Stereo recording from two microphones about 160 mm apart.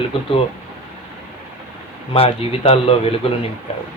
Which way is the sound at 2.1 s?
35° left (ahead or behind).